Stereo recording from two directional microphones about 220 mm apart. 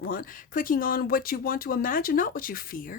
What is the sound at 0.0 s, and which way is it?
Speech, 40° left (ahead or behind).